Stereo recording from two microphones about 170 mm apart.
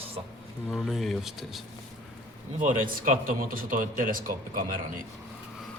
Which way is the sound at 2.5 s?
50° right (ahead or behind).